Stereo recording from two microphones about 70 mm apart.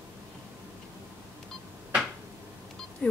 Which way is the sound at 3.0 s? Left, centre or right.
Centre.